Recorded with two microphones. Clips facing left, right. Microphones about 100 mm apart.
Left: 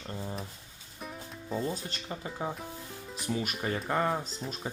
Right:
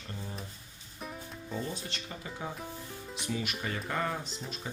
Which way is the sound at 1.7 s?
40° left (ahead or behind).